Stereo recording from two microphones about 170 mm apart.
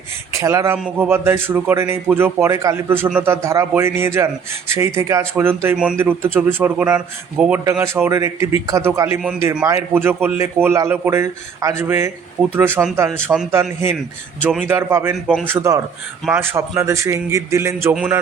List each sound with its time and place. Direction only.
0.3 s speech: 15° right (ahead or behind)
7.6 s speech: 15° right (ahead or behind)
15.1 s a man's voice: centre (ahead or behind)
15.4 s speech: 15° right (ahead or behind)